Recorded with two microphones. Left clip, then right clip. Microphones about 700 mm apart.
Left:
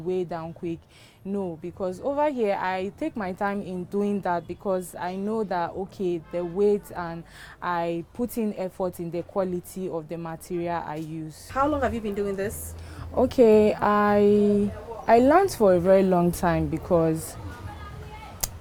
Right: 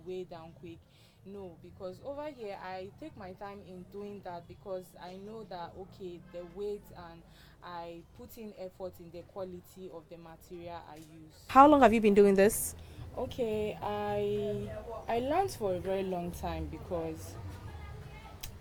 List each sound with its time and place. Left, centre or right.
0.1 s speech: left
11.5 s a woman's voice: right
13.1 s speech: left